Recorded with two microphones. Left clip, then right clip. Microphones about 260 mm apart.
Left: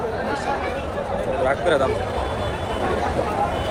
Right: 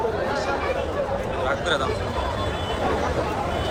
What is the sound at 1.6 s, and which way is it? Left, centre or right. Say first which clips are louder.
Speech: left 6 dB; left.